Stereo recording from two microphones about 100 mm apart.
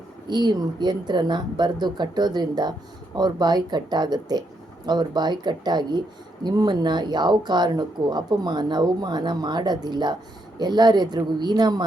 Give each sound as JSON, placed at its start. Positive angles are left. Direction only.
{"t": 0.3, "sound": "speech", "side_deg": -45}